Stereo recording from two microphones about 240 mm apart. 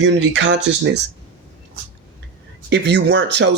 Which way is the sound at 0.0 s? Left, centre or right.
Right.